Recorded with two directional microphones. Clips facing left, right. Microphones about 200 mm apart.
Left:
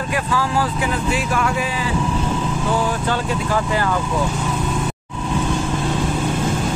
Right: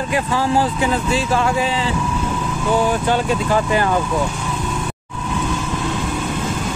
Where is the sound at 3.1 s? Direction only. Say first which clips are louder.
Right 3 dB; 20° right (ahead or behind).